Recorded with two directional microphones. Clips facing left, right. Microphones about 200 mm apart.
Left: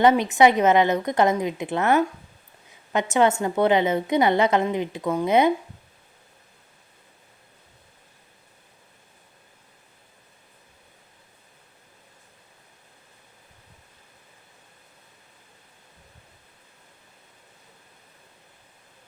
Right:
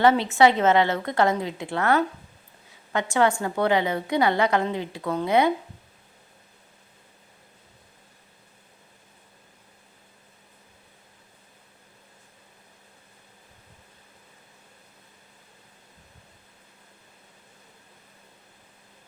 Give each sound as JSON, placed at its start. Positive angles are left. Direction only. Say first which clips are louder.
{"t": 0.0, "sound": "a woman's voice", "louder": "left 1 dB", "side_deg": 15}